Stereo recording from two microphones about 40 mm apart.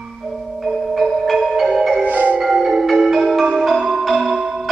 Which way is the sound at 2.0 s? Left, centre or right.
Right.